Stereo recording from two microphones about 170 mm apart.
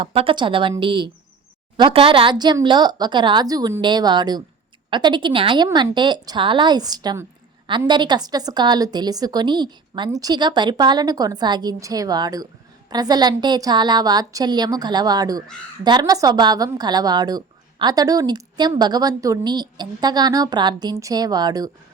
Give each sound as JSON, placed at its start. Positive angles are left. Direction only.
{"t": 0.0, "sound": "a woman's voice", "side_deg": -35}